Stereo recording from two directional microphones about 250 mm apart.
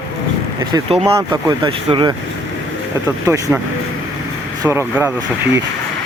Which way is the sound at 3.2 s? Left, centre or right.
Centre.